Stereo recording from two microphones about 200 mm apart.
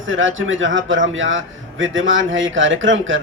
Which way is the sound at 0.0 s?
75° right (ahead or behind).